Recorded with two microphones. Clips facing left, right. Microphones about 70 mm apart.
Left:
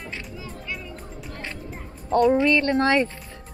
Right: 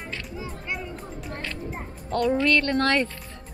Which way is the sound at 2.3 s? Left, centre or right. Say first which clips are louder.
Right 1 dB; centre.